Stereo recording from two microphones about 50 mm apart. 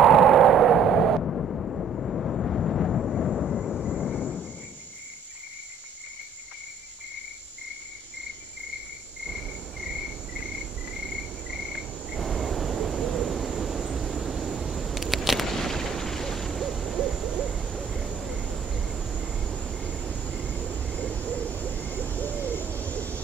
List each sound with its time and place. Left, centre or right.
0.0 s a sound: centre
9.3 s cricket: centre
12.2 s vehicle: centre
16.7 s hoot: centre
18.2 s vehicle: centre
18.9 s cricket: centre
21.1 s hoot: centre